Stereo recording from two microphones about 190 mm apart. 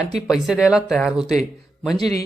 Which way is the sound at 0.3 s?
Centre (ahead or behind).